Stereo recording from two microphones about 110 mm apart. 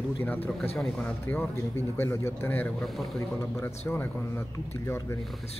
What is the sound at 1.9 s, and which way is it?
Speech, 20° left (ahead or behind).